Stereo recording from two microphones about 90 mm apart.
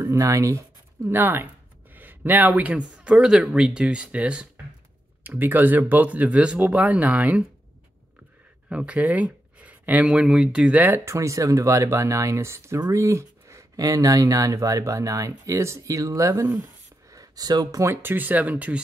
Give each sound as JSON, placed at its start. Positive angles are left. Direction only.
{"t": 0.0, "sound": "speech", "side_deg": -35}
{"t": 1.0, "sound": "speech", "side_deg": -25}
{"t": 8.6, "sound": "speech", "side_deg": -15}
{"t": 11.1, "sound": "speech", "side_deg": -35}
{"t": 17.8, "sound": "speech", "side_deg": -20}